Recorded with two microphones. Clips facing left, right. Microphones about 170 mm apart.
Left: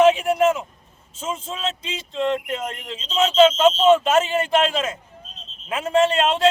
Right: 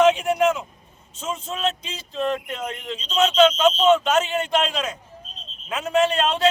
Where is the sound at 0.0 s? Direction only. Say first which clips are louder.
Left 2 dB; 5° left (ahead or behind).